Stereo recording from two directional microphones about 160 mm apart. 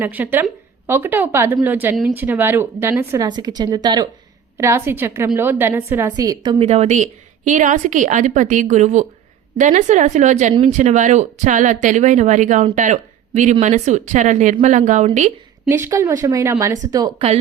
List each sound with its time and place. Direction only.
0.0 s a woman's voice: 10° right (ahead or behind)
3.2 s a woman's voice: 25° right (ahead or behind)
6.1 s speech: 25° right (ahead or behind)
6.6 s speech: 40° right (ahead or behind)
15.7 s speech: 15° right (ahead or behind)